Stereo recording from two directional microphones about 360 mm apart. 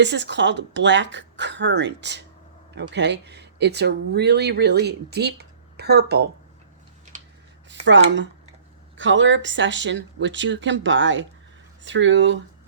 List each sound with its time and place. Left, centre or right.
0.0 s speech: right
7.7 s speech: right